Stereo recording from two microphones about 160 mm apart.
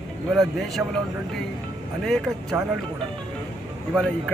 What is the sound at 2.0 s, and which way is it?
Speech, centre (ahead or behind).